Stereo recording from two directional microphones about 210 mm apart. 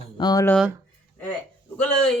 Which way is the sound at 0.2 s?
20° left (ahead or behind).